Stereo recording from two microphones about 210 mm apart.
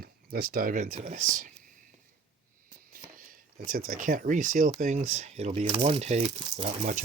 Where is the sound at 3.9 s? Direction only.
40° right (ahead or behind).